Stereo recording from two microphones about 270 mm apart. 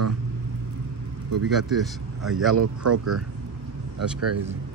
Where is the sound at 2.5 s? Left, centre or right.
Right.